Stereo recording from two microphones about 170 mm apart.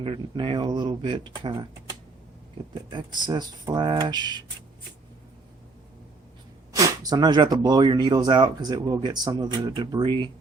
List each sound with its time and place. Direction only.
0.0 s speech: 30° right (ahead or behind)
2.7 s speech: 25° right (ahead or behind)
6.7 s speech: 20° right (ahead or behind)